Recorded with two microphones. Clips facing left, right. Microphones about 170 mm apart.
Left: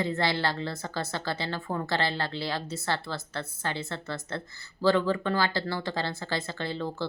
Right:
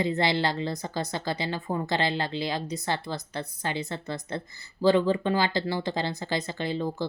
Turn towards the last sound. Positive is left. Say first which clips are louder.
# right 3 dB
turn(degrees=-15)  # may be behind; listen again after turning